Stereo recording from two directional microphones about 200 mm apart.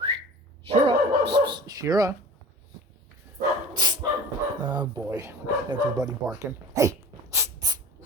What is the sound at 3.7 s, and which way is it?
Dog, 20° right (ahead or behind).